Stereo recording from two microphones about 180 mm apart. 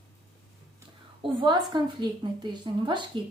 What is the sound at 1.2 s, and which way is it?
Speech, 25° right (ahead or behind).